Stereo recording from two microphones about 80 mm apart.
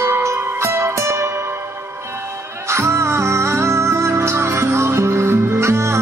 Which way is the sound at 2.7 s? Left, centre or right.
Right.